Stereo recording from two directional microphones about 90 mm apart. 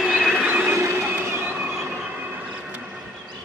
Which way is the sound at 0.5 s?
20° right (ahead or behind).